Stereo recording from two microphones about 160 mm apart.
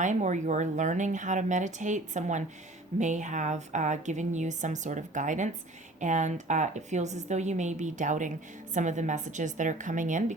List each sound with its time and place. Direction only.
0.0 s speech: 50° right (ahead or behind)